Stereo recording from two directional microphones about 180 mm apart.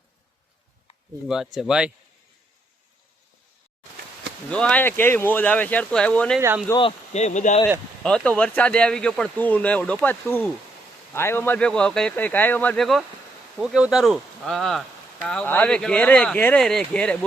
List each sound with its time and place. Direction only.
1.3 s speech: centre (ahead or behind)
4.4 s speech: 5° left (ahead or behind)
6.7 s speech: 35° left (ahead or behind)
8.0 s speech: 5° left (ahead or behind)